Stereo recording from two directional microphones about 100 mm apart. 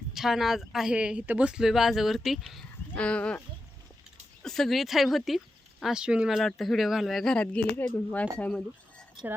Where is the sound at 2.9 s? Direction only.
10° left (ahead or behind).